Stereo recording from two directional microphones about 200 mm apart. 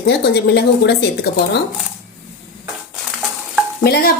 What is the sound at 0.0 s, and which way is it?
A woman's voice, 55° left (ahead or behind).